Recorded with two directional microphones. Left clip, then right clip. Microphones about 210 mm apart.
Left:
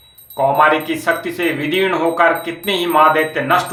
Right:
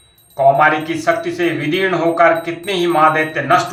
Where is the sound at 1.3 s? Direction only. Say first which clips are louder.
Even; 50° left (ahead or behind).